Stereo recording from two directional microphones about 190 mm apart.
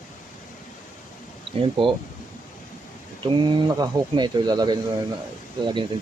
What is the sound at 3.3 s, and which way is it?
Speech, 25° right (ahead or behind).